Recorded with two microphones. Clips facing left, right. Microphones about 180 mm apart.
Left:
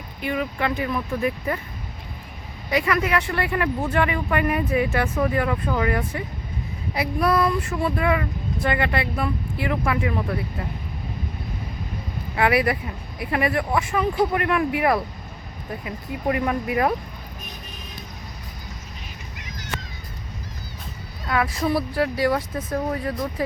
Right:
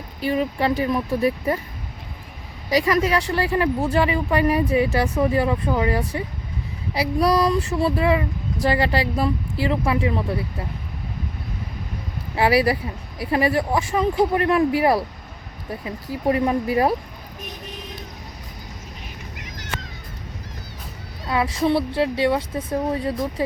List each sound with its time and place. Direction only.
0.2 s speech: 30° right (ahead or behind)
2.6 s speech: 35° right (ahead or behind)
12.4 s speech: 30° right (ahead or behind)
21.2 s speech: 30° right (ahead or behind)